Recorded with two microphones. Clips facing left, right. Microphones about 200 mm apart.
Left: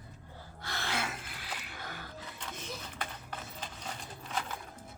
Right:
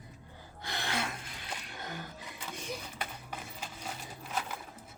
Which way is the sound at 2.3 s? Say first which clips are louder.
Right 4 dB; 15° right (ahead or behind).